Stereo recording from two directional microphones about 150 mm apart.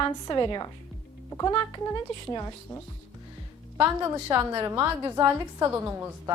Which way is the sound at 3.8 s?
15° right (ahead or behind).